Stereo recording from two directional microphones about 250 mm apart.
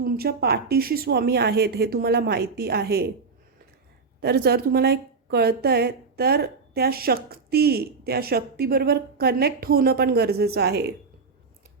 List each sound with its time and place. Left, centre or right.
0.0 s a woman's voice: right
4.2 s a woman's voice: right